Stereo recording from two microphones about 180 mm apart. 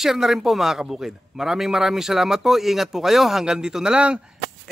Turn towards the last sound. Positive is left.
turn(degrees=-5)  # may be behind; listen again after turning